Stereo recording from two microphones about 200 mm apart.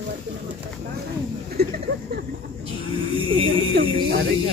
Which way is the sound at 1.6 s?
50° right (ahead or behind).